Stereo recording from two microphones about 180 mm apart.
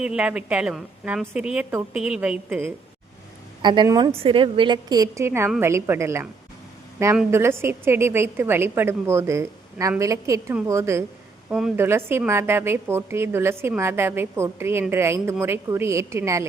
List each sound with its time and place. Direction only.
0.0 s a woman's voice: 5° right (ahead or behind)
3.6 s a woman's voice: 25° right (ahead or behind)
7.3 s a woman's voice: 15° right (ahead or behind)
11.4 s a woman's voice: centre (ahead or behind)
11.8 s a woman's voice: 15° right (ahead or behind)